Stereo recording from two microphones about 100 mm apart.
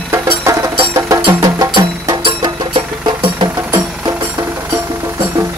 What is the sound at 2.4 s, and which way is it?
Music, 55° right (ahead or behind).